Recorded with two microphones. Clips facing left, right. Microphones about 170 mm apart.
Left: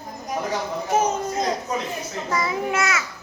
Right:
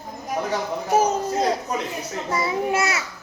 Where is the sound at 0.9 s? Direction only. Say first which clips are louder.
Right 2 dB; 35° right (ahead or behind).